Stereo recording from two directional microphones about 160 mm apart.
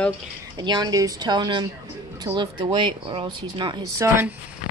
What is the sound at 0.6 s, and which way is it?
Speech, 25° right (ahead or behind).